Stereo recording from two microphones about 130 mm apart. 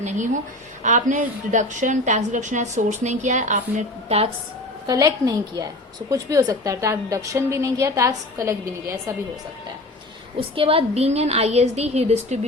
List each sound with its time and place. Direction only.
0.8 s a woman's voice: 75° right (ahead or behind); by 4.3 s 60° right (ahead or behind)
4.9 s a woman's voice: 30° right (ahead or behind)
10.5 s a woman's voice: 45° right (ahead or behind)